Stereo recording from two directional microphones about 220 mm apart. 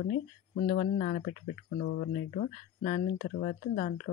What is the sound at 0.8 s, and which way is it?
Speech, 35° left (ahead or behind).